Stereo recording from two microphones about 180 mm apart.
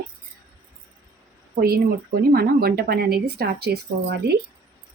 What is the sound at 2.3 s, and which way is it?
A woman's voice, 55° right (ahead or behind).